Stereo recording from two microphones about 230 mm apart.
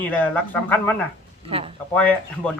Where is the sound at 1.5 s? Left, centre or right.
Right.